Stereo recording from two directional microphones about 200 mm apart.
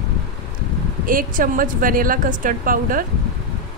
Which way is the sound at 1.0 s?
45° right (ahead or behind).